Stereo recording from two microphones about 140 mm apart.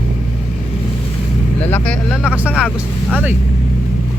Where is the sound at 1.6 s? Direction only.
15° left (ahead or behind).